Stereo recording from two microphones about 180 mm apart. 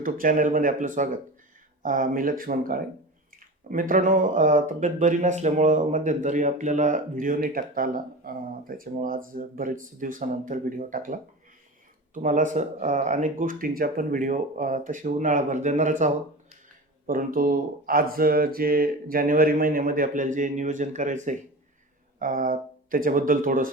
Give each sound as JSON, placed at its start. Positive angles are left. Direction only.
{"t": 0.0, "sound": "speech", "side_deg": -50}